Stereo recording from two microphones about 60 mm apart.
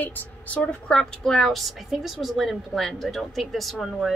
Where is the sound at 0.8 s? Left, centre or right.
Centre.